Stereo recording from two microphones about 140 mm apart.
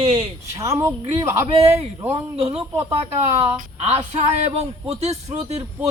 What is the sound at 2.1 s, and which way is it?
Speech, 45° right (ahead or behind).